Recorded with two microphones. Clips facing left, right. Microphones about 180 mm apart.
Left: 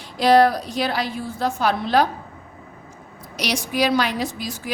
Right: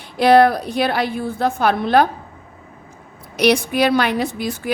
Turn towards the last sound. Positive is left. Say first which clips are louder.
# right 5 dB
turn(degrees=-60)  # may be behind; listen again after turning